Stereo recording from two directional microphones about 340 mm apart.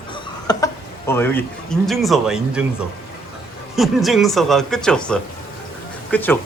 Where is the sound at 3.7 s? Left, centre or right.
Centre.